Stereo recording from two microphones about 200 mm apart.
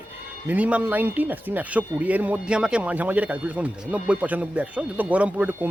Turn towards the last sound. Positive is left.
turn(degrees=-10)  # may be behind; listen again after turning